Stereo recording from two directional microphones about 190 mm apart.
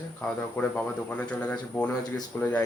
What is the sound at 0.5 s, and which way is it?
Speech, 10° left (ahead or behind).